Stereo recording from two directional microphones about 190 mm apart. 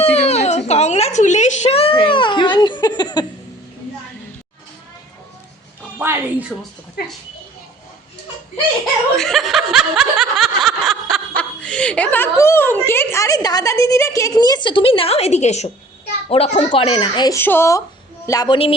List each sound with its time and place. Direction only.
0.0 s a sound: 35° left (ahead or behind)
6.0 s speech: 10° right (ahead or behind)
9.1 s snicker: centre (ahead or behind); by 15.7 s 35° left (ahead or behind)
16.3 s speech: 30° left (ahead or behind)